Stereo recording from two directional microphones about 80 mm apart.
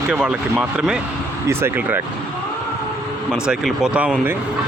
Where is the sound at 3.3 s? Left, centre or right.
Centre.